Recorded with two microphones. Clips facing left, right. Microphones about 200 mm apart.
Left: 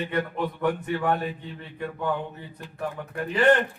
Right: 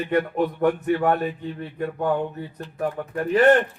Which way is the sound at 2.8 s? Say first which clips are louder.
Right 5 dB; 45° right (ahead or behind).